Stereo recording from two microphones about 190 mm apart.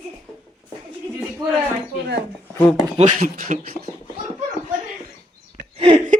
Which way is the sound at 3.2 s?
40° right (ahead or behind).